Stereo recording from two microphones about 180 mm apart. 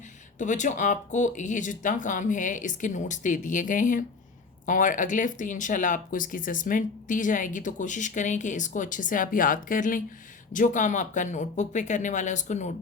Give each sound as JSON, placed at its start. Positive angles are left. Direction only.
{"t": 0.3, "sound": "speech", "side_deg": 45}